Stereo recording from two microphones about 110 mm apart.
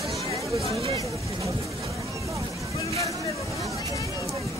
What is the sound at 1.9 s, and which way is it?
Vehicle, 30° right (ahead or behind).